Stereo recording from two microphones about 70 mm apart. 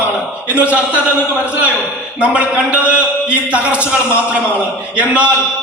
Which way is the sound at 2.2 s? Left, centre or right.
Centre.